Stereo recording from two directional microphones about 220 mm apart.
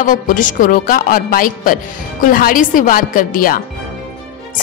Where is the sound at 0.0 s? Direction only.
35° left (ahead or behind).